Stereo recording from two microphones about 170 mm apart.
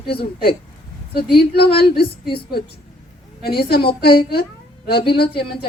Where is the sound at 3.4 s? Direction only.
65° left (ahead or behind).